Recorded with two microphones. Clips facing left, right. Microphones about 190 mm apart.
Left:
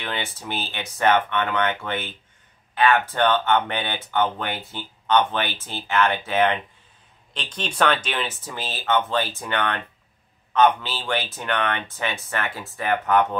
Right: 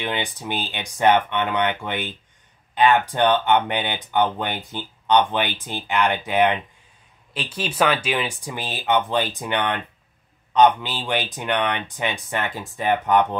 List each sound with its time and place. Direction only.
0.0 s speech: 15° right (ahead or behind)